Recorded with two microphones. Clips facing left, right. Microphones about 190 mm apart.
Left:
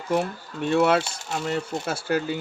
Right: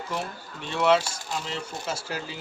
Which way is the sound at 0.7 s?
60° left (ahead or behind).